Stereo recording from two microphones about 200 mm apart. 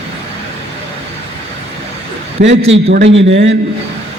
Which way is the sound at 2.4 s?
60° right (ahead or behind).